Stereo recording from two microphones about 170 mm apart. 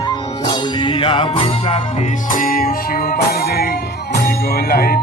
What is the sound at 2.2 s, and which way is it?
Music, 55° left (ahead or behind).